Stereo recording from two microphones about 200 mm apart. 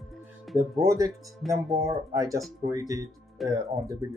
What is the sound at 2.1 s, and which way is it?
Speech, 15° right (ahead or behind).